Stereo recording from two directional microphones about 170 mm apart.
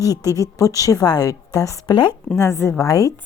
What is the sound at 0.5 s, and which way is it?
A woman's voice, 20° left (ahead or behind).